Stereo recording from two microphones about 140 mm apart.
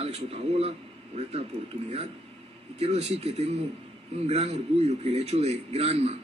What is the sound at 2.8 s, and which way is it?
A man's voice, 45° right (ahead or behind).